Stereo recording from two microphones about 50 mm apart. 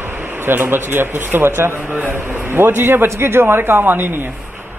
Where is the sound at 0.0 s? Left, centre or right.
Right.